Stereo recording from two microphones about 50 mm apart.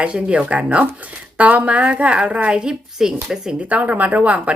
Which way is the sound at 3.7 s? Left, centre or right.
Right.